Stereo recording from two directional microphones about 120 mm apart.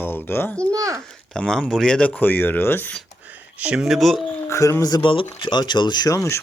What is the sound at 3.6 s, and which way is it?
Speech, 5° right (ahead or behind).